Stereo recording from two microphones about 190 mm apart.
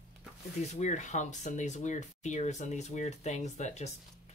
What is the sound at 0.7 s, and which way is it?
Speech, 40° left (ahead or behind).